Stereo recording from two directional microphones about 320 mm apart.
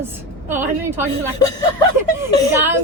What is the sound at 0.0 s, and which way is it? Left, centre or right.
A woman's voice, centre.